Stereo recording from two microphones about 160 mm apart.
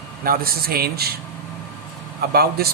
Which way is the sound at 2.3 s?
75° right (ahead or behind).